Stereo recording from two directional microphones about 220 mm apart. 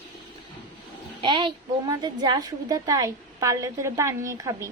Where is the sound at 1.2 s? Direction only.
20° right (ahead or behind).